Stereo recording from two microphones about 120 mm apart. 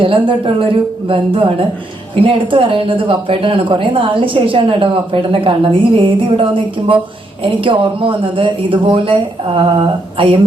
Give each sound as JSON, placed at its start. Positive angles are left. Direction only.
{"t": 0.0, "sound": "speech", "side_deg": -50}